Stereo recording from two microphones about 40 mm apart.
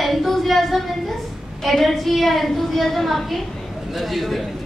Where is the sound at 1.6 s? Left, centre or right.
Centre.